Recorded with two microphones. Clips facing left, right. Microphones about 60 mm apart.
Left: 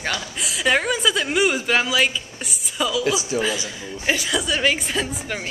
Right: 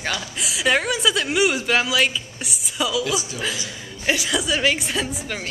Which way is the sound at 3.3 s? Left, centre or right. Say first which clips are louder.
Left 6 dB; left.